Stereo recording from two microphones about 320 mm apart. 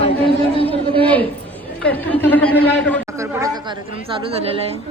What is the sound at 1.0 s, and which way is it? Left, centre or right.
Speech, centre.